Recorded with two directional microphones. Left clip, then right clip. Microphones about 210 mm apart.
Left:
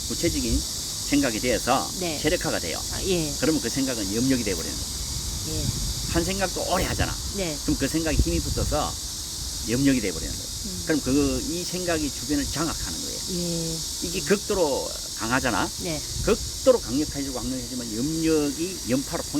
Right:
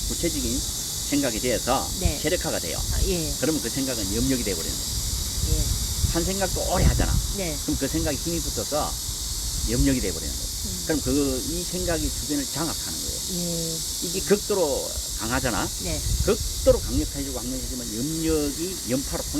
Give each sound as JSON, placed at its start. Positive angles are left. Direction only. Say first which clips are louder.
{"t": 1.1, "sound": "speech", "louder": "left 1 dB", "side_deg": 30}
{"t": 6.1, "sound": "speech", "louder": "left 1 dB", "side_deg": 35}
{"t": 14.3, "sound": "speech", "louder": "right 1 dB", "side_deg": 35}
{"t": 18.2, "sound": "speech", "louder": "left 2 dB", "side_deg": 30}